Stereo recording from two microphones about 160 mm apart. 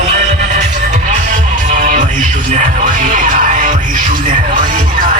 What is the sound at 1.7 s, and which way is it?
Music, 50° right (ahead or behind).